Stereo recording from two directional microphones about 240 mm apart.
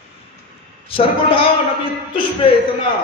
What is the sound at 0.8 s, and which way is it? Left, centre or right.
Speech, left.